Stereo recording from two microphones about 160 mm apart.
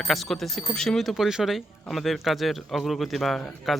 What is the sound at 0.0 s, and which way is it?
Speech, centre (ahead or behind).